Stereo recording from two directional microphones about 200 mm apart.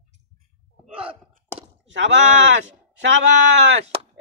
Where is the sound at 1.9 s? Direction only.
65° right (ahead or behind).